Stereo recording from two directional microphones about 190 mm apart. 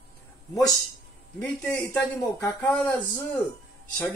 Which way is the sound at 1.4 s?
10° left (ahead or behind).